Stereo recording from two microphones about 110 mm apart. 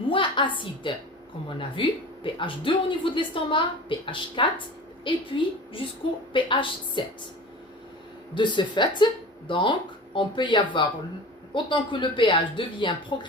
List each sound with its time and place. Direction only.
0.1 s a woman's voice: 45° left (ahead or behind)
6.3 s speech: 50° left (ahead or behind)
8.4 s speech: 45° left (ahead or behind)